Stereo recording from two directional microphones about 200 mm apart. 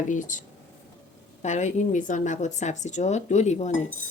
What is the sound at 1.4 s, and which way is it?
Speech, 35° left (ahead or behind).